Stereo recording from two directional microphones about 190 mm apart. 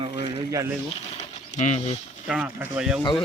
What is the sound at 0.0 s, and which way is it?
Speech, 20° right (ahead or behind).